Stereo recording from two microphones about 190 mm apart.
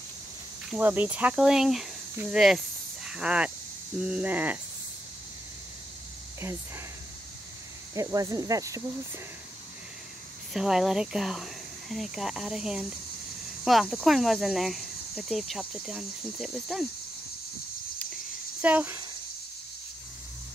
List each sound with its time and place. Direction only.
0.7 s speech: 10° right (ahead or behind)
7.9 s speech: 15° right (ahead or behind)
10.5 s speech: centre (ahead or behind)
18.6 s speech: 10° right (ahead or behind)